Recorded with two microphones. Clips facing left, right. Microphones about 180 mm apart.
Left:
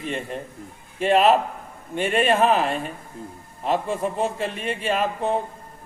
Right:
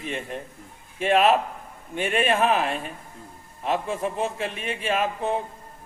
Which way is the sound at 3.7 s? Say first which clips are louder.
Left 2 dB; 5° right (ahead or behind).